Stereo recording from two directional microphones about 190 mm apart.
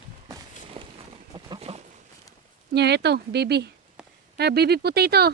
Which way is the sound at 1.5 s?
30° right (ahead or behind).